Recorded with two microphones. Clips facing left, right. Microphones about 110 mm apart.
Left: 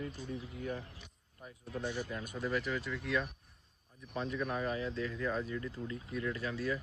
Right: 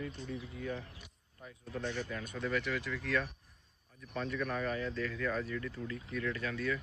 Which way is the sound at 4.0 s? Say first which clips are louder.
Even; 25° left (ahead or behind).